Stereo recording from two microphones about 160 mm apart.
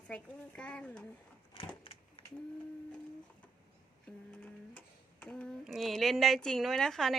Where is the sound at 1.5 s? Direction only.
35° left (ahead or behind).